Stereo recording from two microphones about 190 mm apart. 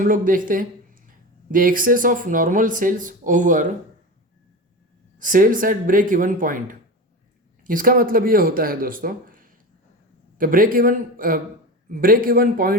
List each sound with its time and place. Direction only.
0.0 s speech: 45° right (ahead or behind)
5.2 s speech: 45° right (ahead or behind)